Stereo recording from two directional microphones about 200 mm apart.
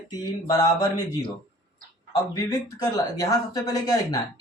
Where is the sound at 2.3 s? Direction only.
20° left (ahead or behind).